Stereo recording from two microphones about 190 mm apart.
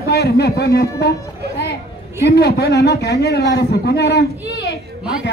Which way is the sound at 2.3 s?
55° left (ahead or behind).